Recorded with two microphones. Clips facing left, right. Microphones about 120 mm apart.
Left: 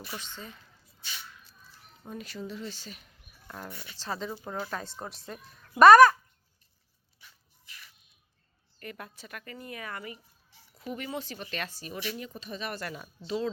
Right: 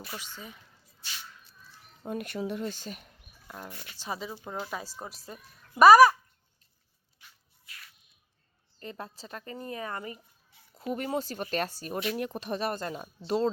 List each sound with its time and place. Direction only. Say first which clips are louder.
0.1 s speech: left 2 dB; 10° right (ahead or behind)
2.0 s speech: right 6 dB; 60° right (ahead or behind)
3.4 s speech: left 1 dB; 5° right (ahead or behind)
8.8 s speech: right 2 dB; 25° right (ahead or behind); by 12.6 s 55° right (ahead or behind)
12.8 s speech: right 3 dB; 30° right (ahead or behind)
13.2 s speech: right 4 dB; 50° right (ahead or behind)